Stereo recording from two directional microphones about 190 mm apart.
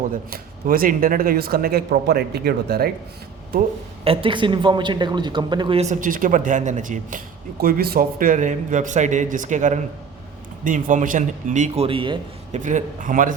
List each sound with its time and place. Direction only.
0.3 s speech: 50° right (ahead or behind)
4.0 s a man's voice: 30° right (ahead or behind)
12.5 s speech: 40° right (ahead or behind)